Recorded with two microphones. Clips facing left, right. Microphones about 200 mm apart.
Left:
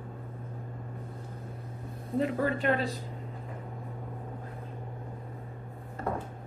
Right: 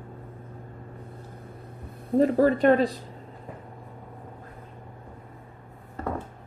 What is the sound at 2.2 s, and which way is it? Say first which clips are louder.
Speech: right 9 dB; 40° right (ahead or behind).